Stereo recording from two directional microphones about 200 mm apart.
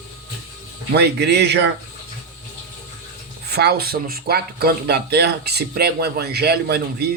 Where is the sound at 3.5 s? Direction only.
50° right (ahead or behind).